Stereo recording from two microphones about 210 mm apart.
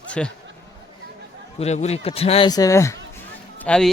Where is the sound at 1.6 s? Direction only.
30° left (ahead or behind); by 2.9 s 15° left (ahead or behind).